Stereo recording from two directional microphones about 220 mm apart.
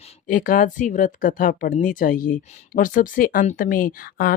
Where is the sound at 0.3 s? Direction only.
35° left (ahead or behind).